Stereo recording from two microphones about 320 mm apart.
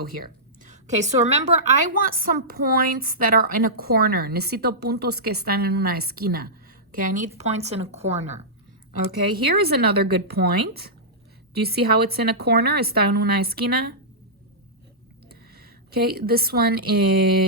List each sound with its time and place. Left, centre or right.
0.2 s a woman's voice: right
9.5 s a woman's voice: right
15.3 s a woman's voice: right